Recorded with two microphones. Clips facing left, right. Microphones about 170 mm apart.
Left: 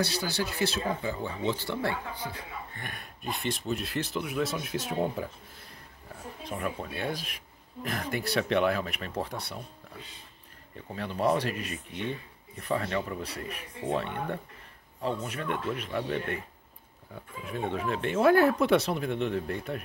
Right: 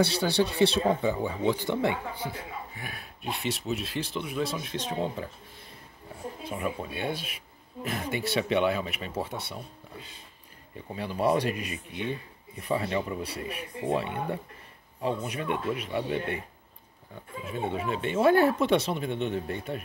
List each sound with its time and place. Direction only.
0.0 s speech: 25° right (ahead or behind)
1.1 s speech: 10° right (ahead or behind)
2.2 s speech: 5° right (ahead or behind)
6.5 s speech: 5° right (ahead or behind)
10.9 s speech: 10° right (ahead or behind)
17.6 s speech: 5° right (ahead or behind)